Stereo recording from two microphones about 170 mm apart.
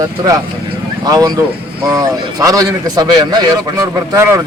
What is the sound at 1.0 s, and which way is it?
A man's voice, 20° right (ahead or behind).